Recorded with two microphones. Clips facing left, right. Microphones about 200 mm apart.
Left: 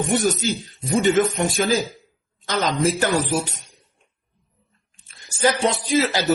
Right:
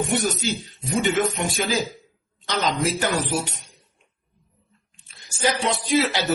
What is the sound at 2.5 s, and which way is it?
Speech, 50° left (ahead or behind).